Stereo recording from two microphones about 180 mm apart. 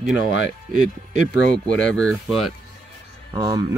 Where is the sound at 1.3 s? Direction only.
5° left (ahead or behind).